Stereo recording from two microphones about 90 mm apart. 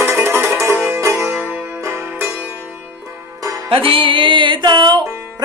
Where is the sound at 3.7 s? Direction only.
80° right; by 5.0 s 55° right (ahead or behind).